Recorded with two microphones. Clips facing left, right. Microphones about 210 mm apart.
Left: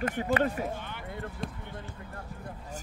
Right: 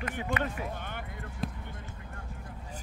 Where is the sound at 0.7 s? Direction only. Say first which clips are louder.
Right 1 dB; 50° right (ahead or behind).